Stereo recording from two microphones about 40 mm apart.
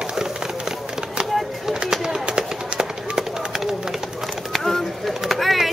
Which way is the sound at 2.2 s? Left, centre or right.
Right.